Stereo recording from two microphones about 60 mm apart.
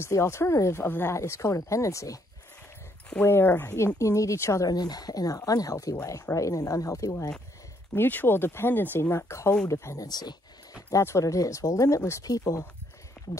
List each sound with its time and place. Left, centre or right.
0.0 s speech: left
0.8 s speech: left
1.1 s speech: left
3.3 s speech: left
3.7 s speech: left
7.9 s speech: left
9.1 s speech: left
9.7 s speech: left
12.3 s speech: left